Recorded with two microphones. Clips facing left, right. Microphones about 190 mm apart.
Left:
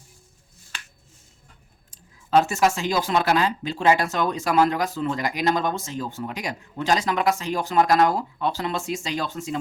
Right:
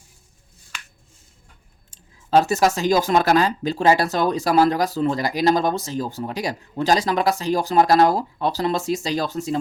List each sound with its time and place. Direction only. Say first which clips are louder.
1.9 s speech: right 2 dB; 35° right (ahead or behind)